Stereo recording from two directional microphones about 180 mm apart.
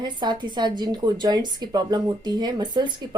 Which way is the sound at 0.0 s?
25° right (ahead or behind).